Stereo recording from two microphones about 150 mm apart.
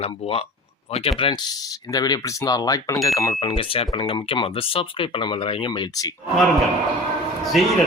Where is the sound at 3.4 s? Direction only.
35° left (ahead or behind).